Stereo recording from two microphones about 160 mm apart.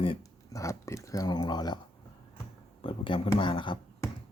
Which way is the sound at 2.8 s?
30° left (ahead or behind).